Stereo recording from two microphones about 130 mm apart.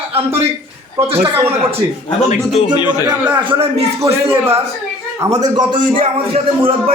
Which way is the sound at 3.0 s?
10° right (ahead or behind).